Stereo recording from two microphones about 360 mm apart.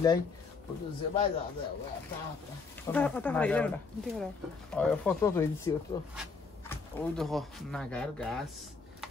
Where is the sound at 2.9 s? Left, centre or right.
Centre.